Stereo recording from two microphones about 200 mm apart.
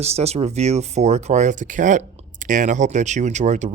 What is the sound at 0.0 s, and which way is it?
Speech, 30° right (ahead or behind).